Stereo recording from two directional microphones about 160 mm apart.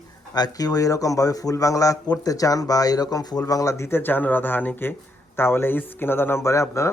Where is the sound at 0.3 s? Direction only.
25° left (ahead or behind).